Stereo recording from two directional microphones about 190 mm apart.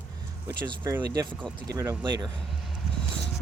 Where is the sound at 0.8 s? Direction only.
15° right (ahead or behind).